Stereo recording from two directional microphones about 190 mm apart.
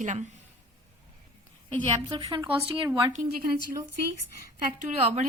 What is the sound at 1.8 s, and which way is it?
A woman's voice, 25° right (ahead or behind).